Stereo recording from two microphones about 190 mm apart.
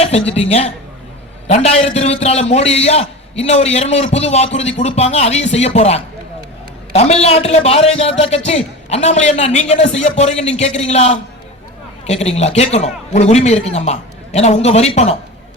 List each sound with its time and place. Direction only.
0.0 s a man's voice: 30° left (ahead or behind)